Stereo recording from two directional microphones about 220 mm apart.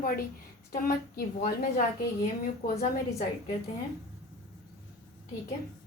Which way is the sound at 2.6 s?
40° left (ahead or behind).